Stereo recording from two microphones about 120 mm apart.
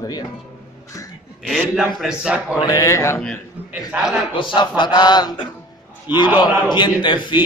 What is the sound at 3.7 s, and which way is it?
Speech, 5° right (ahead or behind).